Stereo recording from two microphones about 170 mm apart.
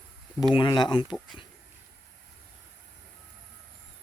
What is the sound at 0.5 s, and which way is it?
Speech, 25° left (ahead or behind).